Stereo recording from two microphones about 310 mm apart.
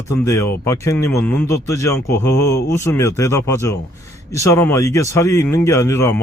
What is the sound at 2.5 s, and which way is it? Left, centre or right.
Speech, left.